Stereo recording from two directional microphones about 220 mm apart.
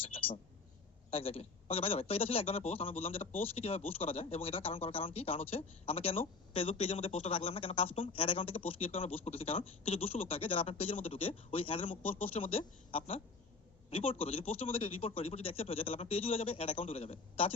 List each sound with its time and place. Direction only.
0.0 s a man's voice: 25° left (ahead or behind)